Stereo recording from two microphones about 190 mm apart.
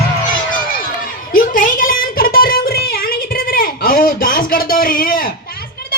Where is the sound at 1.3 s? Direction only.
45° left (ahead or behind).